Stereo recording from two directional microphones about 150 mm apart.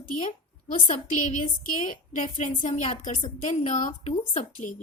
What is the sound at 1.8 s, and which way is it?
A woman's voice, 60° left (ahead or behind).